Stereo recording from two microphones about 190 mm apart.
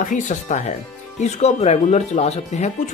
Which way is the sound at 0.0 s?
40° left (ahead or behind).